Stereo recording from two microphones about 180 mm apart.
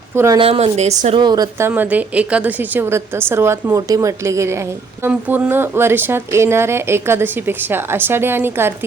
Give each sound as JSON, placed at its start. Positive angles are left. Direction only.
{"t": 0.3, "sound": "a woman's voice", "side_deg": -30}
{"t": 1.2, "sound": "speech", "side_deg": -20}